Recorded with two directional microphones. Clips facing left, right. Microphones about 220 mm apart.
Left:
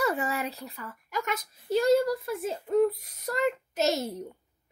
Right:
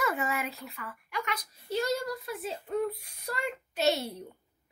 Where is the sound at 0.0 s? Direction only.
35° left (ahead or behind).